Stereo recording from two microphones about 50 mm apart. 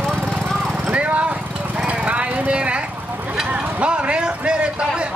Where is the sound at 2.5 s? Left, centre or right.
Right.